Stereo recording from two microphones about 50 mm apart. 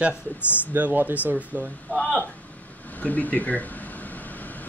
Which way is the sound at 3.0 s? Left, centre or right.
Left.